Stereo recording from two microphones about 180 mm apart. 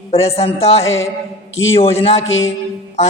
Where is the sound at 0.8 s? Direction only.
90° left.